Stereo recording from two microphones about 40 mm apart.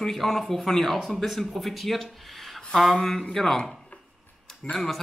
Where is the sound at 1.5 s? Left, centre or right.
Centre.